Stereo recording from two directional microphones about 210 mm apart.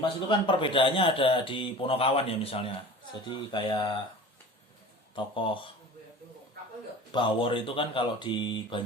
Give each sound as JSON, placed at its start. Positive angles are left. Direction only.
{"t": 0.0, "sound": "speech", "side_deg": 25}
{"t": 5.1, "sound": "speech", "side_deg": 25}
{"t": 7.1, "sound": "speech", "side_deg": 25}